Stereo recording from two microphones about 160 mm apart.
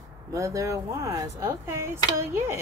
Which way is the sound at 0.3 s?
20° right (ahead or behind).